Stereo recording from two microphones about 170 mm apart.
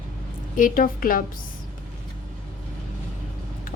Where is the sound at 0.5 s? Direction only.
55° left (ahead or behind).